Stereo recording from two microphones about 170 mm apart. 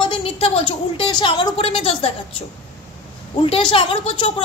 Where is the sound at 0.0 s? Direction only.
30° left (ahead or behind).